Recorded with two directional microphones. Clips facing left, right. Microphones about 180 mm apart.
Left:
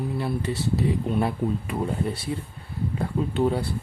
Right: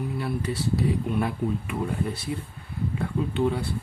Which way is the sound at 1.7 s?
35° left (ahead or behind).